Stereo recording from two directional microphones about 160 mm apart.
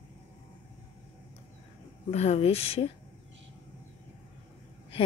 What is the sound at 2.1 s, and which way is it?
Speech, 40° left (ahead or behind).